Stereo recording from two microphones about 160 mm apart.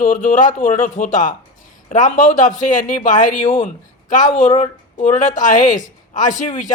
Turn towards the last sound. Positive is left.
turn(degrees=55)  # may be behind; listen again after turning